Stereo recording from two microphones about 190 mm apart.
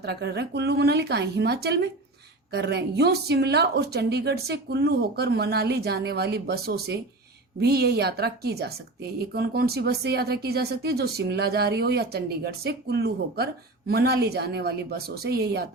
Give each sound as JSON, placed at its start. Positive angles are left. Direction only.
{"t": 0.0, "sound": "speech", "side_deg": -60}